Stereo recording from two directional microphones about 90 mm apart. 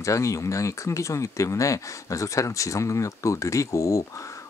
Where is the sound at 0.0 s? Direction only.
35° left (ahead or behind).